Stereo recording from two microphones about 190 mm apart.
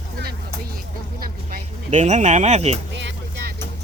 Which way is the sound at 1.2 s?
50° right (ahead or behind).